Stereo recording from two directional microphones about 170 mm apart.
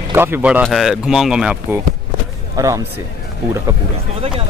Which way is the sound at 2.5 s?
20° right (ahead or behind).